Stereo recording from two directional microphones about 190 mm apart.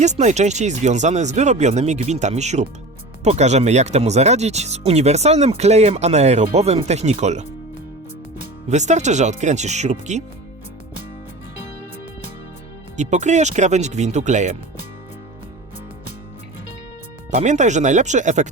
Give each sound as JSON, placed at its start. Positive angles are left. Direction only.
{"t": 0.0, "sound": "speech", "side_deg": -40}
{"t": 8.7, "sound": "speech", "side_deg": -40}
{"t": 13.0, "sound": "speech", "side_deg": -40}
{"t": 17.3, "sound": "speech", "side_deg": -40}